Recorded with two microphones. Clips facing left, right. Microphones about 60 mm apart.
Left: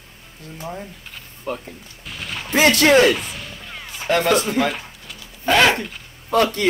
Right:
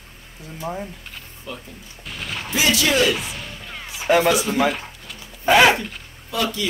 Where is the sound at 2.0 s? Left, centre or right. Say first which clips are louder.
Right 1 dB; centre.